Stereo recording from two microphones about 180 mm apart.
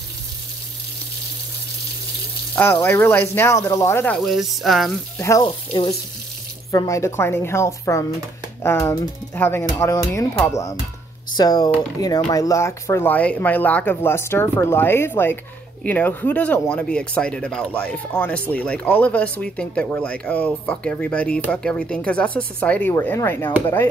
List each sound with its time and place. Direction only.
2.5 s speech: 10° left (ahead or behind)
5.2 s speech: 20° left (ahead or behind)